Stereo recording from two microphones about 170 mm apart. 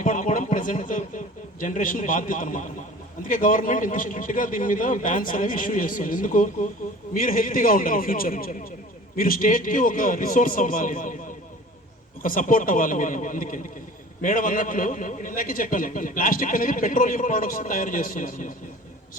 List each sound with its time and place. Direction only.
0.0 s a man's voice: 50° left (ahead or behind)
12.2 s a man's voice: 55° left (ahead or behind)